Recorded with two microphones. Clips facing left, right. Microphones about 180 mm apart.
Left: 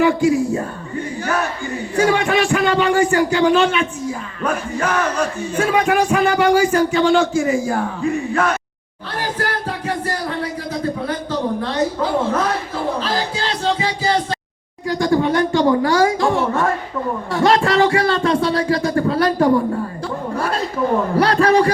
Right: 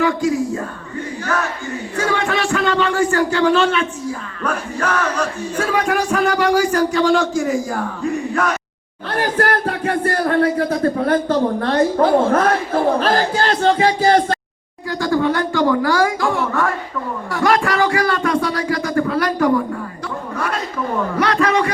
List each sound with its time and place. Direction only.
0.0 s speech: 25° left (ahead or behind)
2.0 s speech: 15° left (ahead or behind)
9.0 s speech: 55° right (ahead or behind)
14.8 s speech: 20° left (ahead or behind)
20.3 s a sound: 30° left (ahead or behind)
21.2 s a man's voice: 35° left (ahead or behind)